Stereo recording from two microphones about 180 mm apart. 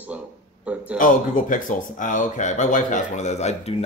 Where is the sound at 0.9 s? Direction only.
45° left (ahead or behind).